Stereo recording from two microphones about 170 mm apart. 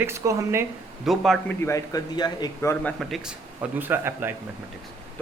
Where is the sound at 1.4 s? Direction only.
15° left (ahead or behind).